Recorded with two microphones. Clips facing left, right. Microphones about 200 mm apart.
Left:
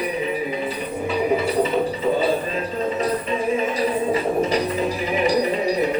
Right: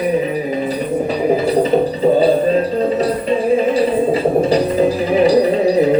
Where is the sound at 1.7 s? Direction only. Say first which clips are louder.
Right 7 dB; 35° right (ahead or behind).